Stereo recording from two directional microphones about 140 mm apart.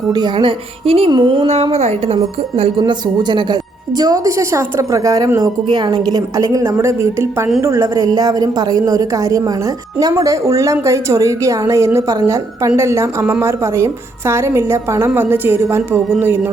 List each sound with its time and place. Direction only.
0.1 s speech: 30° right (ahead or behind)
1.6 s a woman's voice: 45° right (ahead or behind); by 16.5 s 15° right (ahead or behind)